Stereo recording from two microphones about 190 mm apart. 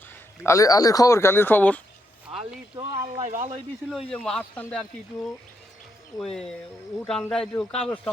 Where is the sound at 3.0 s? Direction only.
40° right (ahead or behind).